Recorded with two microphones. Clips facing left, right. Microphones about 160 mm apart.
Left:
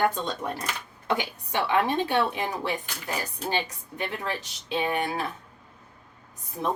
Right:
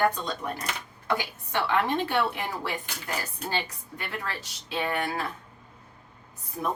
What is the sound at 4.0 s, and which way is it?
A woman's voice, 20° left (ahead or behind).